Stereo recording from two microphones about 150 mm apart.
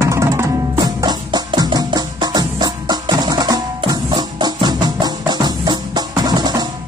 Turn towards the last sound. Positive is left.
turn(degrees=-30)  # may be behind; listen again after turning